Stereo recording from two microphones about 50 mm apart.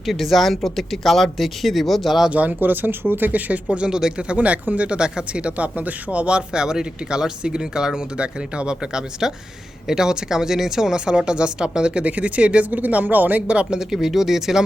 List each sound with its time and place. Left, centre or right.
0.0 s speech: centre
2.3 s speech: right; by 4.4 s centre
4.4 s speech: right
13.5 s speech: right
13.7 s speech: centre